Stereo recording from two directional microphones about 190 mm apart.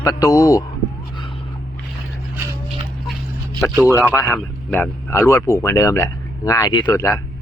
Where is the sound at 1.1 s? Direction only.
25° left (ahead or behind).